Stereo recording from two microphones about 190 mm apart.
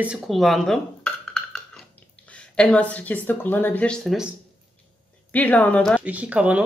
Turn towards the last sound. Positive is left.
turn(degrees=-5)  # may be behind; listen again after turning